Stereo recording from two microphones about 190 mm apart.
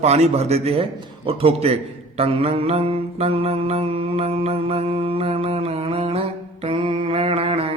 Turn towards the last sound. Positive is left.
turn(degrees=-30)  # may be behind; listen again after turning